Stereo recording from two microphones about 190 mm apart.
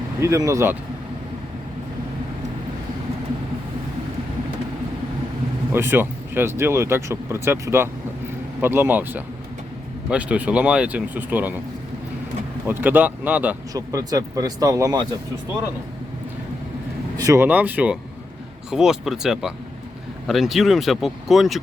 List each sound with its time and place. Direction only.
0.2 s speech: 15° right (ahead or behind)
5.7 s speech: 10° right (ahead or behind)
12.6 s speech: 10° right (ahead or behind)
17.2 s speech: 15° right (ahead or behind); by 21.6 s centre (ahead or behind)